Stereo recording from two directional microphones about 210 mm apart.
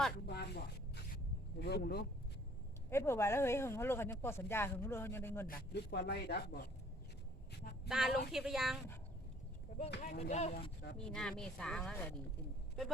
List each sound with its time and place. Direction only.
0.3 s a sound: 50° left (ahead or behind)
1.5 s speech: 50° left (ahead or behind)
2.9 s speech: 10° left (ahead or behind)
5.5 s speech: 50° left (ahead or behind)
7.9 s speech: centre (ahead or behind)
10.0 s speech: 35° left (ahead or behind)
10.9 s speech: 5° left (ahead or behind)